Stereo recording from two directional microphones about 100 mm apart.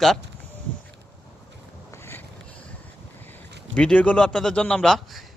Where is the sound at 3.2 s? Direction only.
15° left (ahead or behind).